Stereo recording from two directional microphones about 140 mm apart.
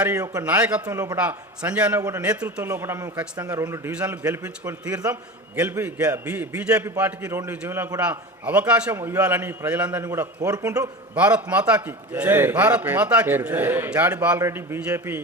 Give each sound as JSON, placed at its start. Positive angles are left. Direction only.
{"t": 0.4, "sound": "a man's voice", "side_deg": -10}
{"t": 2.0, "sound": "a man's voice", "side_deg": -25}
{"t": 2.2, "sound": "a man's voice", "side_deg": -10}
{"t": 5.5, "sound": "a man's voice", "side_deg": -15}
{"t": 10.0, "sound": "a man's voice", "side_deg": -20}
{"t": 11.1, "sound": "a man's voice", "side_deg": -10}